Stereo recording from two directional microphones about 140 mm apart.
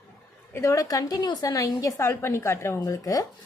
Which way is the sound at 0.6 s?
25° left (ahead or behind).